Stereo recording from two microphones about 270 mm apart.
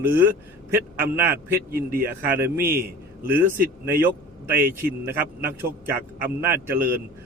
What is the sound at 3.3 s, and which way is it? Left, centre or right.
A man's voice, centre.